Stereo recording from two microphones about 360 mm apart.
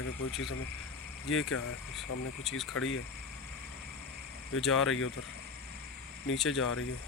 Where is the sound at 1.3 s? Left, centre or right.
Left.